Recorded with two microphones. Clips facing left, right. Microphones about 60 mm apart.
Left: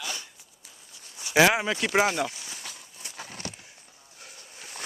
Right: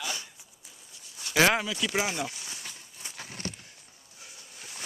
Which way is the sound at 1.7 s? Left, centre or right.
Left.